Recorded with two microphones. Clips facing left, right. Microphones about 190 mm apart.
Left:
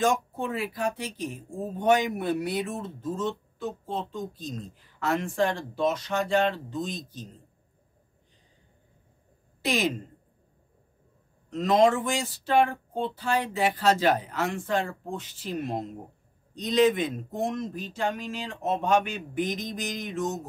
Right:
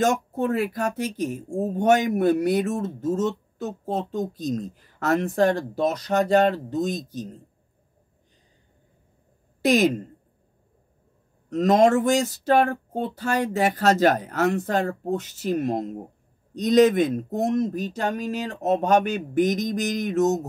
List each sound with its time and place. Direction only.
0.3 s speech: 45° right (ahead or behind)
9.6 s speech: 45° right (ahead or behind)
11.5 s speech: 45° right (ahead or behind)